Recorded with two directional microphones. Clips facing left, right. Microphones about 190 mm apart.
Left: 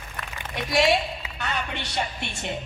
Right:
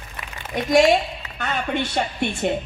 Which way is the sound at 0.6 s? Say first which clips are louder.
Right 6 dB; 45° right (ahead or behind).